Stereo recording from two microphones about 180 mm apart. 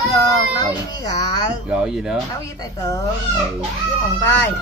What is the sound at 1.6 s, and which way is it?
Speech, 5° right (ahead or behind).